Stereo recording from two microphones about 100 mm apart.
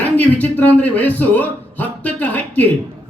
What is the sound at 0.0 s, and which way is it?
A man's voice, 15° left (ahead or behind).